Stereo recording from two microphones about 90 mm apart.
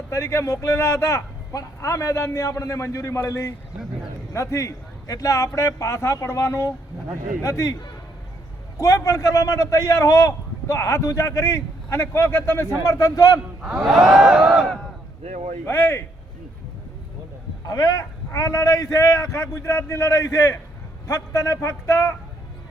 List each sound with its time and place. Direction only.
0.1 s a man's voice: 30° left (ahead or behind)
8.8 s a man's voice: 35° left (ahead or behind)
13.6 s a sound: 10° right (ahead or behind)
15.6 s speech: 25° left (ahead or behind)
17.7 s a man's voice: 45° left (ahead or behind)